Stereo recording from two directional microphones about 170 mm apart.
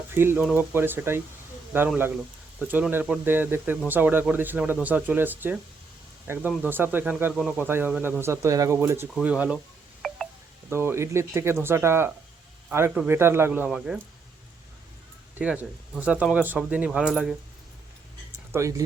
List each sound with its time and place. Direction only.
0.1 s speech: 15° right (ahead or behind)
10.0 s music: centre (ahead or behind)
10.7 s speech: 15° right (ahead or behind)
15.4 s speech: 10° right (ahead or behind)
18.5 s speech: 15° right (ahead or behind)